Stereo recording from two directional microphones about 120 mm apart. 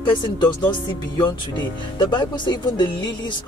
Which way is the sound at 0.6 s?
40° left (ahead or behind).